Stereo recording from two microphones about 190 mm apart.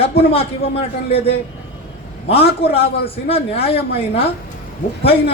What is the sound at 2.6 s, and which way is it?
A man's voice, 30° left (ahead or behind).